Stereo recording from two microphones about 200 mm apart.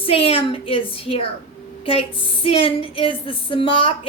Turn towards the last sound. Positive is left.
turn(degrees=25)  # may be behind; listen again after turning